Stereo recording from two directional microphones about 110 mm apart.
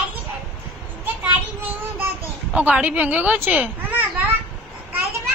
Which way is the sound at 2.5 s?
10° right (ahead or behind).